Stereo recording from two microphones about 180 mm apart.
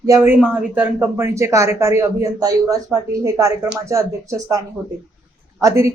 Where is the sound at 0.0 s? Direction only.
15° right (ahead or behind).